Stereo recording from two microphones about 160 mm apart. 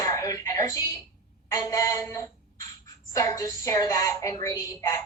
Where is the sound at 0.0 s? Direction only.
20° left (ahead or behind).